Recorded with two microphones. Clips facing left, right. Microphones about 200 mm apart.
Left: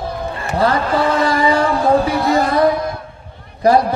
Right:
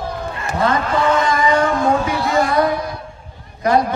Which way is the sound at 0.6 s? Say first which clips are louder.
Left 2 dB; 35° left (ahead or behind).